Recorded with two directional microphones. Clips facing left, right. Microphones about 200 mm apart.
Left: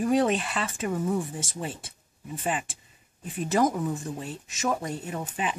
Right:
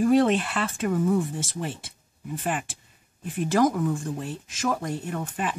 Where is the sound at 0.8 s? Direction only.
5° left (ahead or behind).